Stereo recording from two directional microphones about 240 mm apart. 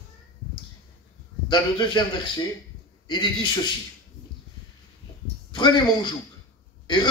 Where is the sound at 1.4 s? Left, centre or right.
Centre.